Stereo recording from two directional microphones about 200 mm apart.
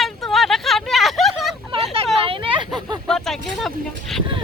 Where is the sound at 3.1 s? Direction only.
Centre (ahead or behind).